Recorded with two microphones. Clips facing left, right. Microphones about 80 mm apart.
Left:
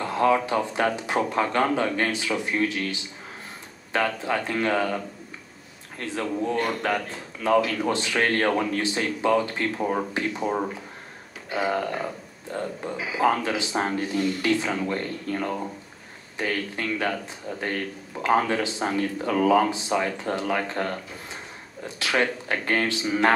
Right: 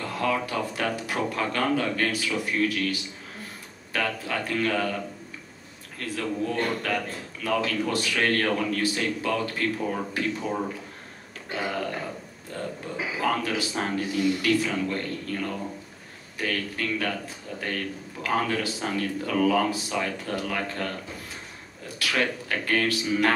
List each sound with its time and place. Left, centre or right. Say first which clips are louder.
0.0 s speech: left 5 dB; left
12.5 s speech: left 3 dB; left